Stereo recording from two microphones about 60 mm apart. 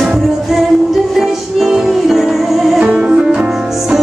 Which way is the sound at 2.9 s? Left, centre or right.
Right.